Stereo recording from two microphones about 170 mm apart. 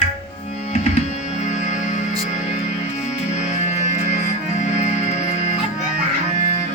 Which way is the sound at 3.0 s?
40° left (ahead or behind).